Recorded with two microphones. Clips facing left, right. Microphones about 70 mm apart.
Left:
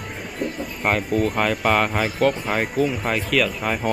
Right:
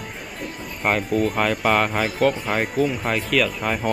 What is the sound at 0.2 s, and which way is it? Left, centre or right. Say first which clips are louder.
Speech: left 9 dB; centre.